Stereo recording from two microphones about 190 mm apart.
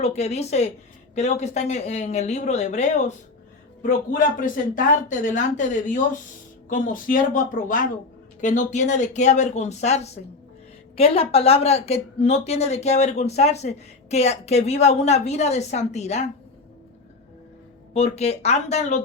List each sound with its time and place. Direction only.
0.0 s a woman's voice: 35° left (ahead or behind)
17.9 s a woman's voice: 35° left (ahead or behind)